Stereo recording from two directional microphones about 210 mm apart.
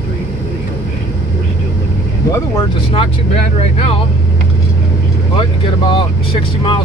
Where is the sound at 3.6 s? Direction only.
30° left (ahead or behind).